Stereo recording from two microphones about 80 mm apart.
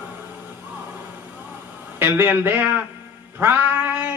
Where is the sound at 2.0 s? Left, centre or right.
Right.